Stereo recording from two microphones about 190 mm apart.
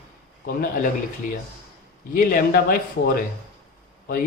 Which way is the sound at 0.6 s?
45° left (ahead or behind).